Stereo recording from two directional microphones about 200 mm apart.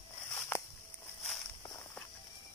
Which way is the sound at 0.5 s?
10° left (ahead or behind).